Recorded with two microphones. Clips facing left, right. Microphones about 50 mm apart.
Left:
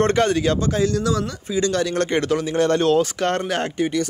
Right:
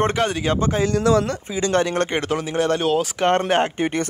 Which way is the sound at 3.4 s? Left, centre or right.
Right.